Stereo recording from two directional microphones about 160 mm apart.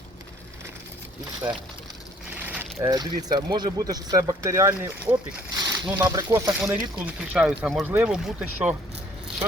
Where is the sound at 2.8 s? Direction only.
25° right (ahead or behind); by 7.9 s 5° right (ahead or behind).